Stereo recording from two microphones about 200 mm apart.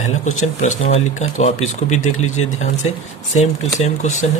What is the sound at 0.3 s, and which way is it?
Speech, 35° left (ahead or behind).